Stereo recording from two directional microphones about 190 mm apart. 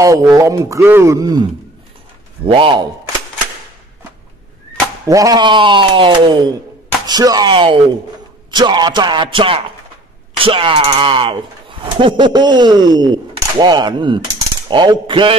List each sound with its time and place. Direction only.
0.0 s speech: 15° right (ahead or behind)
2.4 s speech: 25° right (ahead or behind)
5.0 s speech: 20° right (ahead or behind)